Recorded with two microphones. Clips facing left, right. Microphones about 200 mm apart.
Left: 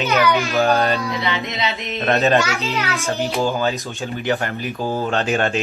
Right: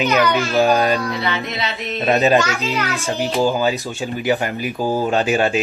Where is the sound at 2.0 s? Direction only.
15° right (ahead or behind).